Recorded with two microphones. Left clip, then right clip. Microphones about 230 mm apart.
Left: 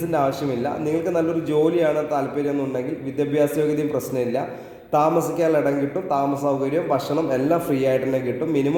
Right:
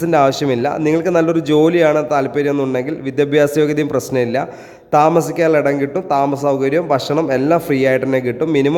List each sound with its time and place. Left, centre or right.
0.1 s a man's voice: right